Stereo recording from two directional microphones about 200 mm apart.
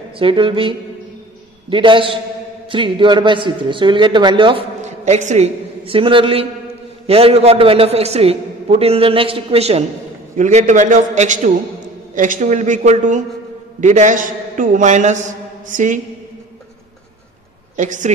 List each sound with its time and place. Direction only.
0.2 s a man's voice: 25° right (ahead or behind)
17.7 s a man's voice: 40° right (ahead or behind)